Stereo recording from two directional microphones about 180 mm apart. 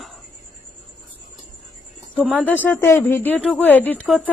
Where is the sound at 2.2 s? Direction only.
5° right (ahead or behind).